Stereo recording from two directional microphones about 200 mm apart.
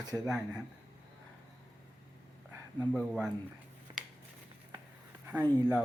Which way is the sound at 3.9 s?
20° right (ahead or behind).